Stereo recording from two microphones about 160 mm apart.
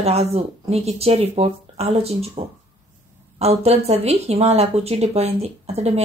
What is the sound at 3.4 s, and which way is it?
Speech, 40° right (ahead or behind).